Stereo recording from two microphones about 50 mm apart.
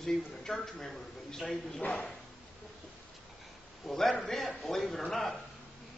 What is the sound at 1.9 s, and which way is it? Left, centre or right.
Speech, left.